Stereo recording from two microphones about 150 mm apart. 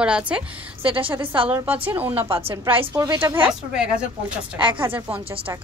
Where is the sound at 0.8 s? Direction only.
35° right (ahead or behind).